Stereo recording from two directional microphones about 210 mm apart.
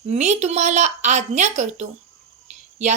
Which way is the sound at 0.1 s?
35° right (ahead or behind).